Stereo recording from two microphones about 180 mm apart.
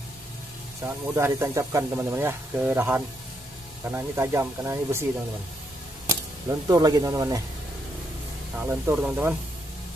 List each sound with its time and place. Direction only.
0.8 s speech: 15° right (ahead or behind)
6.7 s speech: 20° right (ahead or behind)
8.5 s speech: 10° right (ahead or behind)